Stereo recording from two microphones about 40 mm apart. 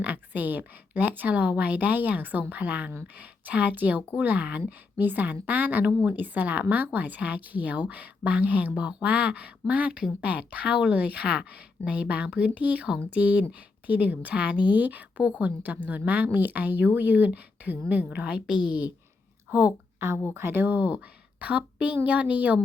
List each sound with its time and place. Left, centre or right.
0.0 s a woman's voice: right
8.7 s a woman's voice: right
19.5 s speech: right
20.0 s speech: right
20.4 s a woman's voice: right